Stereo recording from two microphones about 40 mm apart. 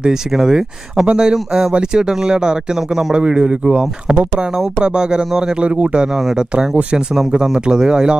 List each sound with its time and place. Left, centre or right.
0.3 s a man's voice: centre